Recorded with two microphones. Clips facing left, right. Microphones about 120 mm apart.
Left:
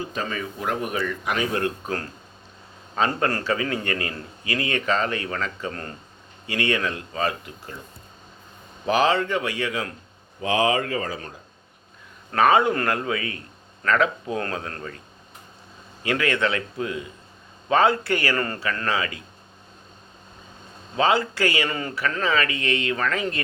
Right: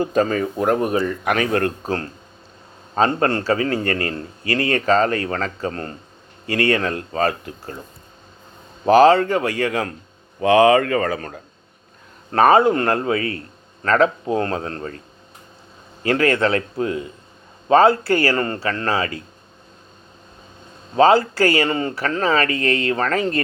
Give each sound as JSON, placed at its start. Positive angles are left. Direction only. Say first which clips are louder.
{"t": 0.0, "sound": "speech", "louder": "right 11 dB", "side_deg": -45}
{"t": 1.2, "sound": "speech", "louder": "right 5 dB", "side_deg": -60}
{"t": 3.2, "sound": "a man's voice", "louder": "right 5 dB", "side_deg": -30}
{"t": 6.5, "sound": "speech", "louder": "right 5 dB", "side_deg": -40}
{"t": 8.9, "sound": "speech", "louder": "right 8 dB", "side_deg": -40}
{"t": 10.4, "sound": "speech", "louder": "right 9 dB", "side_deg": -65}
{"t": 12.3, "sound": "a man's voice", "louder": "right 5 dB", "side_deg": -35}
{"t": 16.0, "sound": "a man's voice", "louder": "right 6 dB", "side_deg": -40}
{"t": 20.9, "sound": "a man's voice", "louder": "right 7 dB", "side_deg": -40}